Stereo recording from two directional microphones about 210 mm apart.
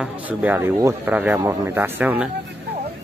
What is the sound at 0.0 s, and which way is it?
Speech, 5° right (ahead or behind).